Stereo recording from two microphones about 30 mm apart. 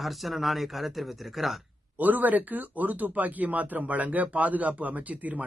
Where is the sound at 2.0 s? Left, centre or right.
Right.